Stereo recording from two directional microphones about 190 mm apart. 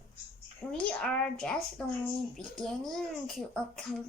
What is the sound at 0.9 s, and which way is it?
Speech, 5° left (ahead or behind).